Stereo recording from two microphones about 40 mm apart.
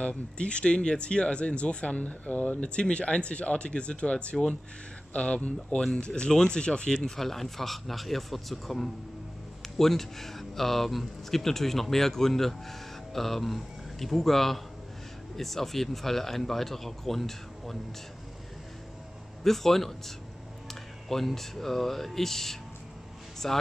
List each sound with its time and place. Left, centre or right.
0.0 s speech: left
2.7 s speech: left
7.1 s speech: centre
19.4 s a man's voice: centre